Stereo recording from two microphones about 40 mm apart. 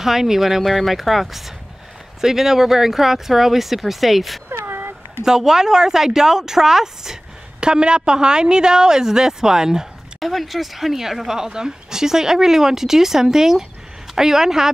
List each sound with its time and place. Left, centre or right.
0.0 s speech: centre
4.5 s a sound: right
5.2 s speech: centre
7.6 s a woman's voice: right
10.2 s speech: centre